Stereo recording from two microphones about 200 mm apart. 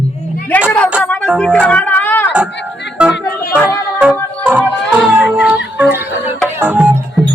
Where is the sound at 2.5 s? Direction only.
60° left (ahead or behind).